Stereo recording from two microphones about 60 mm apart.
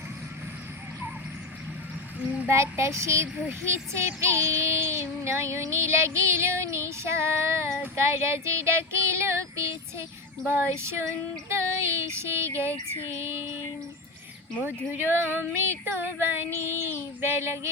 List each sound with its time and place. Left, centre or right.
2.5 s child singing: right
10.4 s child singing: right
14.9 s female singing: right